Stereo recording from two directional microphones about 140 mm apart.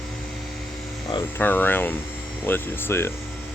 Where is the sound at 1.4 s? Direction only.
15° left (ahead or behind).